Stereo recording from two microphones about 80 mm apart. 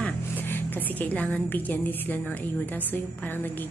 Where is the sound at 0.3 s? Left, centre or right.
Left.